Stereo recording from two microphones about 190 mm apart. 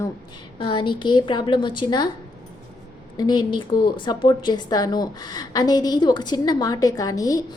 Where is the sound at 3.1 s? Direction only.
20° left (ahead or behind).